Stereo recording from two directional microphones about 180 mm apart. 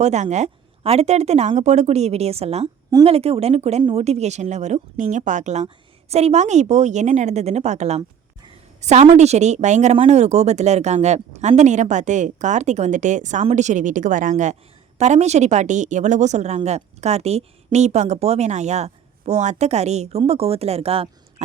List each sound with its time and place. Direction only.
0.0 s speech: 40° right (ahead or behind)